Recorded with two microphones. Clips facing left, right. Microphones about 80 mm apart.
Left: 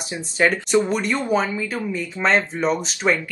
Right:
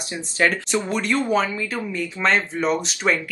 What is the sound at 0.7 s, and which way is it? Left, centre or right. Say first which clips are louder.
Speech: left 2 dB; left.